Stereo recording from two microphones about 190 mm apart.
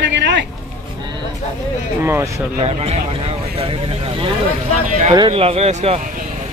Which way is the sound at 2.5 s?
35° right (ahead or behind).